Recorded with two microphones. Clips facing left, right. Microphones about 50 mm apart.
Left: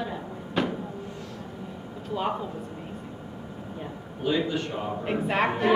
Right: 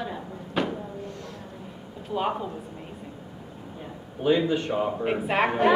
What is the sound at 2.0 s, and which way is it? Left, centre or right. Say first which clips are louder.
Speech: right 2 dB; centre.